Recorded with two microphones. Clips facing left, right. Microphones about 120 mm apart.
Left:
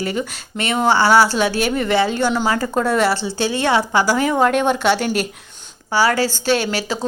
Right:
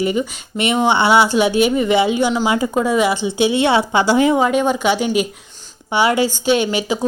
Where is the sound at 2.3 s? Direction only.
5° right (ahead or behind); by 4.4 s 20° right (ahead or behind).